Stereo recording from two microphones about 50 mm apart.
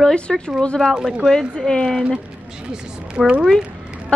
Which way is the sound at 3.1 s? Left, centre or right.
Right.